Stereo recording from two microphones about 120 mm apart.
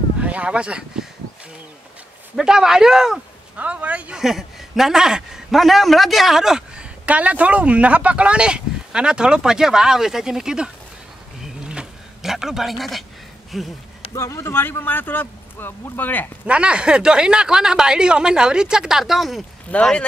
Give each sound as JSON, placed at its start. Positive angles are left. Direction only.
{"t": 0.2, "sound": "speech", "side_deg": -10}
{"t": 2.3, "sound": "speech", "side_deg": -5}
{"t": 11.4, "sound": "a sound", "side_deg": -5}
{"t": 13.5, "sound": "speech", "side_deg": 0}
{"t": 14.1, "sound": "speech", "side_deg": 20}
{"t": 16.4, "sound": "speech", "side_deg": -10}
{"t": 19.7, "sound": "speech", "side_deg": 10}